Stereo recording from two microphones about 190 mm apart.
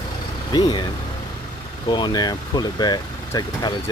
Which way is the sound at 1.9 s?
25° left (ahead or behind).